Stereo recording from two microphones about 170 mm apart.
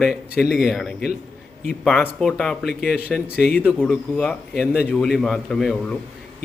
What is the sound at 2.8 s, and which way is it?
Speech, 65° left (ahead or behind).